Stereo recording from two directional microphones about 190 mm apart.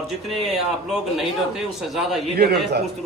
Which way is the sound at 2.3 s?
60° right (ahead or behind).